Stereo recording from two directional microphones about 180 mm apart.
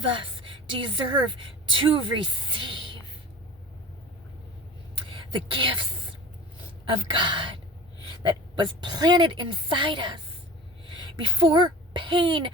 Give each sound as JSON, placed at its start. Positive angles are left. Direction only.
{"t": 0.1, "sound": "a woman's voice", "side_deg": -30}
{"t": 5.0, "sound": "a sound", "side_deg": -30}
{"t": 7.1, "sound": "a woman's voice", "side_deg": -25}